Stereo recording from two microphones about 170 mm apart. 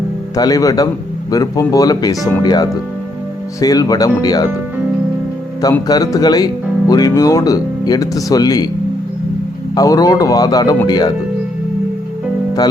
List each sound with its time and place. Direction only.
0.3 s speech: 20° left (ahead or behind)
5.9 s speech: 20° left (ahead or behind)
9.7 s speech: 20° left (ahead or behind)